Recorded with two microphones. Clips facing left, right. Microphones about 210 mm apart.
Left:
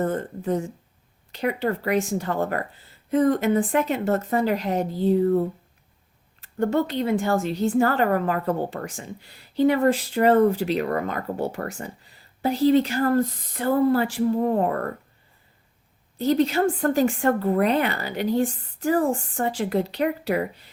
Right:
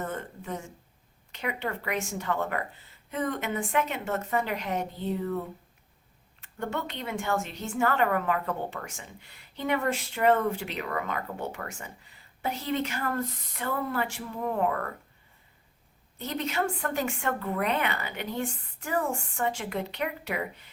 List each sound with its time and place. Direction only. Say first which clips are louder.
0.0 s a woman's voice: left 10 dB; 35° left (ahead or behind)
16.1 s a woman's voice: left 10 dB; 35° left (ahead or behind)